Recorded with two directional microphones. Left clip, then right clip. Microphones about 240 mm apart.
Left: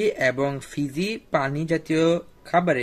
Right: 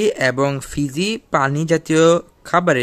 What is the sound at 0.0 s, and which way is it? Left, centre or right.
Speech, right.